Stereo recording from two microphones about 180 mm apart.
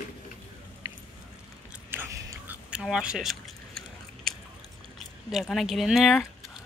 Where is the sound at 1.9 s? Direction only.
15° right (ahead or behind).